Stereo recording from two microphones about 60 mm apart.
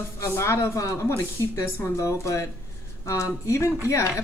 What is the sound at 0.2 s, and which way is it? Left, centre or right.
Speech, left.